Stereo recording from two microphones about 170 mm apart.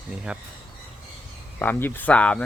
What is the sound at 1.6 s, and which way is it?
Speech, 10° left (ahead or behind).